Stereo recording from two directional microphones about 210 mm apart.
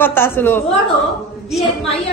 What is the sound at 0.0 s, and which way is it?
Speech, 10° left (ahead or behind).